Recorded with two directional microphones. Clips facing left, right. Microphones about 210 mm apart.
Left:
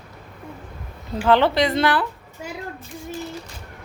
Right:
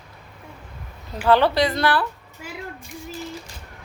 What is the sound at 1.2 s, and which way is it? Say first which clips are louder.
Speech: even; 20° left (ahead or behind).